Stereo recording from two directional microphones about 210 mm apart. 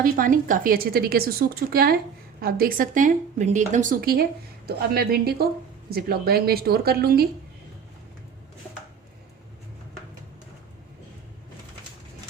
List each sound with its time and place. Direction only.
0.0 s speech: 40° right (ahead or behind)